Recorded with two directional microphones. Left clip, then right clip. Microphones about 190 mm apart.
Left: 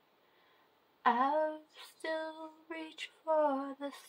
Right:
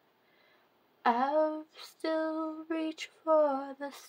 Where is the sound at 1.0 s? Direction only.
30° right (ahead or behind).